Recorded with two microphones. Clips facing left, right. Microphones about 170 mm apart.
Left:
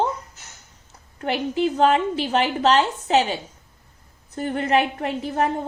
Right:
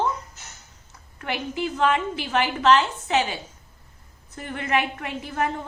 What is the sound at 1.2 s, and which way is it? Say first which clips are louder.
A woman's voice: left 6 dB; 35° left (ahead or behind).